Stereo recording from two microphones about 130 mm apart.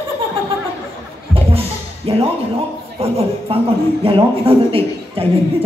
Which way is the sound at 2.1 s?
45° right (ahead or behind).